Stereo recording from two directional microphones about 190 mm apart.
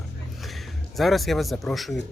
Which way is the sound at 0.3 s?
Centre (ahead or behind).